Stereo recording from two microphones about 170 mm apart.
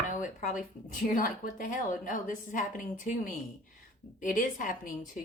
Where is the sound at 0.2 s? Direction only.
50° left (ahead or behind).